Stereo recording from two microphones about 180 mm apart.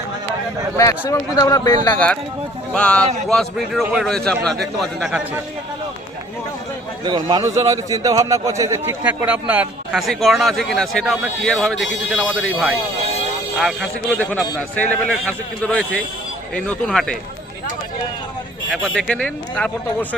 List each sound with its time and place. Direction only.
0.8 s speech: 15° left (ahead or behind)
2.7 s a man's voice: 5° left (ahead or behind)
7.0 s a man's voice: 25° right (ahead or behind); by 17.2 s 5° left (ahead or behind)
18.9 s a man's voice: 5° left (ahead or behind)